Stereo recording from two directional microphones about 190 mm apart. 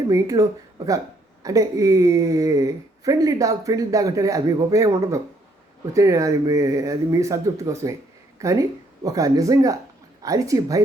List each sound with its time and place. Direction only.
0.1 s speech: 15° right (ahead or behind)